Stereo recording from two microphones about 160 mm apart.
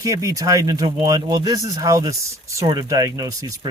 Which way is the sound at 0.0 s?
20° right (ahead or behind).